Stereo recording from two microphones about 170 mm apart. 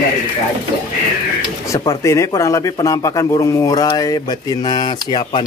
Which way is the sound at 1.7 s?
20° left (ahead or behind).